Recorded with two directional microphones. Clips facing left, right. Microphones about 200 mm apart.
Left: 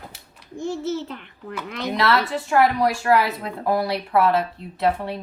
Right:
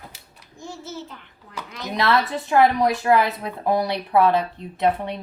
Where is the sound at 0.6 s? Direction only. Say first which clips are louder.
Left 9 dB; 70° left (ahead or behind).